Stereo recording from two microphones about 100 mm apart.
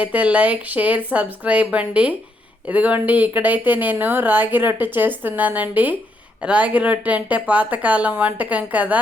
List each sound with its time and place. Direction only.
0.0 s speech: 15° right (ahead or behind)